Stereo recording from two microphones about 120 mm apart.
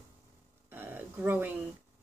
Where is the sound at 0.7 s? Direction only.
15° right (ahead or behind).